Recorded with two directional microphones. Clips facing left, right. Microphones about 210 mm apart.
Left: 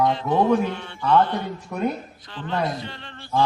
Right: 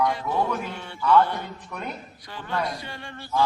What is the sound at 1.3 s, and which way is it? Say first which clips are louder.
A man's voice: left 6 dB; 25° left (ahead or behind).